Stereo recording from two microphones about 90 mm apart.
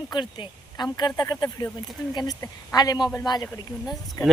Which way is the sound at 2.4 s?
40° left (ahead or behind).